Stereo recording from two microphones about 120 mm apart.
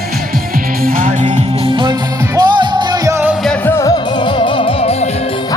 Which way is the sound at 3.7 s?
25° left (ahead or behind).